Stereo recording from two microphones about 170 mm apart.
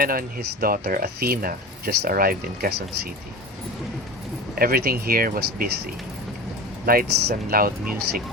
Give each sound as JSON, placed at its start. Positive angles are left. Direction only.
{"t": 0.0, "sound": "speech", "side_deg": -60}
{"t": 4.5, "sound": "speech", "side_deg": -60}